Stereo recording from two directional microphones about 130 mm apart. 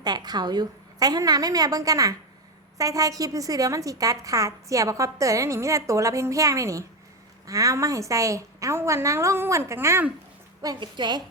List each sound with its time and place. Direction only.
0.0 s a woman's voice: 30° right (ahead or behind)
10.6 s a woman's voice: 30° right (ahead or behind)